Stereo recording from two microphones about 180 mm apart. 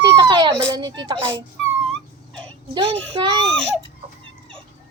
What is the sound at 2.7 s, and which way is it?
Speech, 30° right (ahead or behind).